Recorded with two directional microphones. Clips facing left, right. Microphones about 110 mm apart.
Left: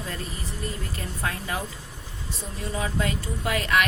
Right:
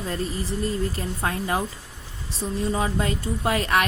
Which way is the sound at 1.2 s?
35° right (ahead or behind).